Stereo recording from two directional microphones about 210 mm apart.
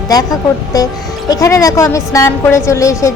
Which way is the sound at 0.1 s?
15° left (ahead or behind).